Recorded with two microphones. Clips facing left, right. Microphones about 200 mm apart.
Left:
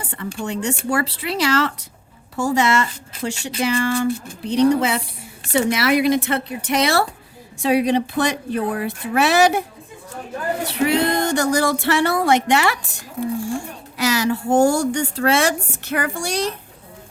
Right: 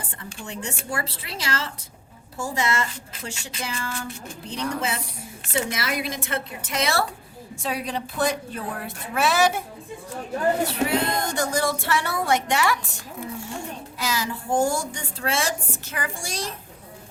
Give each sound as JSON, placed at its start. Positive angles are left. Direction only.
{"t": 0.0, "sound": "a sound", "side_deg": 70}
{"t": 0.4, "sound": "a woman's voice", "side_deg": 70}
{"t": 3.2, "sound": "speech", "side_deg": 90}
{"t": 3.6, "sound": "a woman's voice", "side_deg": 70}
{"t": 10.8, "sound": "a woman's voice", "side_deg": 70}
{"t": 13.9, "sound": "a woman's voice", "side_deg": 75}